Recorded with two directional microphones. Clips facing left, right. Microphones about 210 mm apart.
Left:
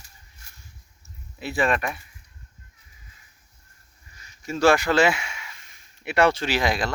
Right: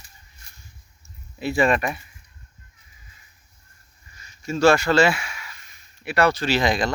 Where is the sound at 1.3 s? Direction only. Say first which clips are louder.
Right 4 dB; centre (ahead or behind).